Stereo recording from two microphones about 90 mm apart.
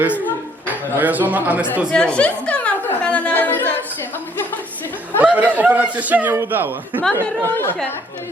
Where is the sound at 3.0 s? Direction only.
15° left (ahead or behind).